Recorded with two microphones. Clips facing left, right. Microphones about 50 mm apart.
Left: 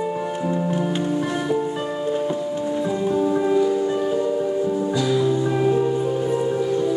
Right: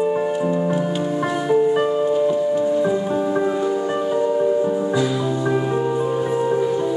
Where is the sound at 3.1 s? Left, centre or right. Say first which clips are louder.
Even; right.